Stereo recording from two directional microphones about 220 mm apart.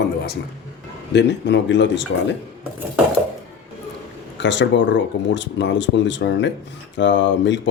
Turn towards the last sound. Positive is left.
turn(degrees=55)  # may be behind; listen again after turning